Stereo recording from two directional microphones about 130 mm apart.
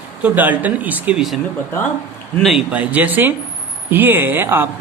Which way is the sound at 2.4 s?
5° right (ahead or behind).